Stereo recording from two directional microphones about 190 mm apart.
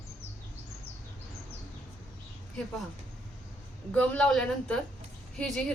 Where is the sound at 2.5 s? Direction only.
Centre (ahead or behind).